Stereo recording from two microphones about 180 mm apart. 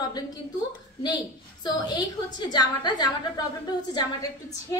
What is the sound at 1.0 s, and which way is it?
A woman's voice, 25° left (ahead or behind).